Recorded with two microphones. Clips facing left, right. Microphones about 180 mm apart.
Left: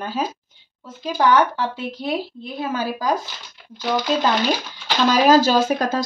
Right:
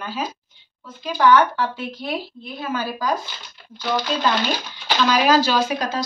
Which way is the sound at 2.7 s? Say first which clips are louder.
Even; 35° left (ahead or behind).